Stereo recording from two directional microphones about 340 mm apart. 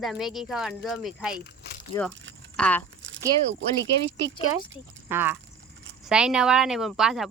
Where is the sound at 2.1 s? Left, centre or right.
Right.